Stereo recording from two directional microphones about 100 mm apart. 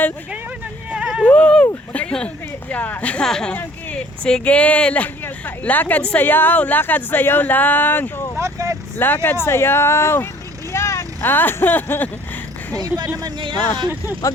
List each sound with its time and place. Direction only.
0.9 s a sound: 10° right (ahead or behind)
1.2 s a sound: 15° left (ahead or behind)
1.9 s a woman's voice: 10° left (ahead or behind)
8.4 s vehicle: 30° right (ahead or behind)
9.0 s speech: 20° left (ahead or behind)
12.7 s speech: 40° right (ahead or behind)
13.2 s a man's voice: 55° right (ahead or behind)